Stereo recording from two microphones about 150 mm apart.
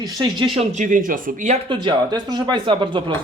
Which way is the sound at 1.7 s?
30° right (ahead or behind).